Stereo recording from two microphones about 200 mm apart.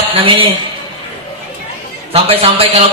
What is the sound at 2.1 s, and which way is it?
Speech, 30° right (ahead or behind).